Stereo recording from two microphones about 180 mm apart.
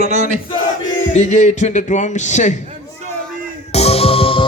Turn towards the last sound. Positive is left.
turn(degrees=30)  # may be behind; listen again after turning